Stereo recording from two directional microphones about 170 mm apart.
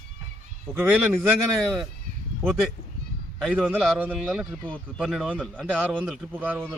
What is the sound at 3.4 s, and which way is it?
A man's voice, 5° right (ahead or behind).